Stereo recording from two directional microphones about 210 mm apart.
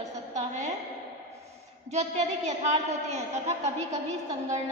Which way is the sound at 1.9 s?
35° right (ahead or behind).